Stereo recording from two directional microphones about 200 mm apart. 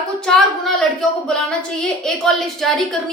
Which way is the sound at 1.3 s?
5° left (ahead or behind).